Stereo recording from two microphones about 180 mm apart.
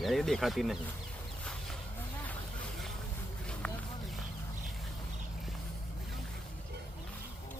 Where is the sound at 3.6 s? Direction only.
5° left (ahead or behind).